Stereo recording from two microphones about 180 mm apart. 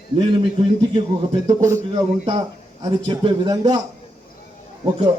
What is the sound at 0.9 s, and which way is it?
A man's voice, 25° right (ahead or behind).